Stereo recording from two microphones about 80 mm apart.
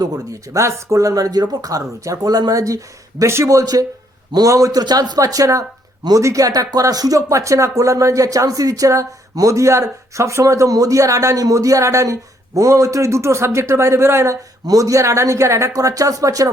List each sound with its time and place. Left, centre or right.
0.0 s speech: right